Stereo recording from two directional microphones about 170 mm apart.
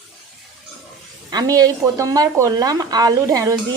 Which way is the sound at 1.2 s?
20° right (ahead or behind).